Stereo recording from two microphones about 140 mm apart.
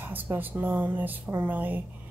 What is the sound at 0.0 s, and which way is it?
A woman's voice, 15° right (ahead or behind).